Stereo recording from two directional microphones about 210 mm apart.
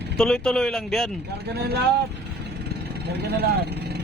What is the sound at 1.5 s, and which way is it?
Speech, 50° right (ahead or behind).